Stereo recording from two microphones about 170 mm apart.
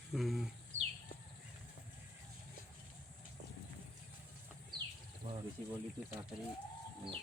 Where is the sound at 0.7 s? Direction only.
45° right (ahead or behind).